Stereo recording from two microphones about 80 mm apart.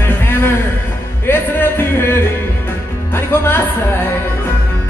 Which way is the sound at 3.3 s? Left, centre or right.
Left.